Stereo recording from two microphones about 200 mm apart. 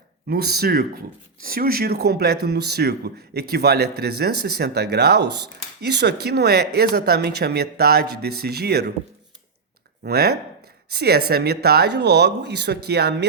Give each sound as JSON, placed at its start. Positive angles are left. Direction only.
{"t": 0.3, "sound": "speech", "side_deg": -50}
{"t": 10.0, "sound": "speech", "side_deg": -50}